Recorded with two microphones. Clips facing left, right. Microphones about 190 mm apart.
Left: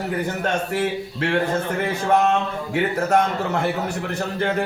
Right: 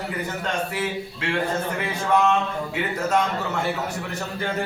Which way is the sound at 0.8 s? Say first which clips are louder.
Left 4 dB; 55° left (ahead or behind).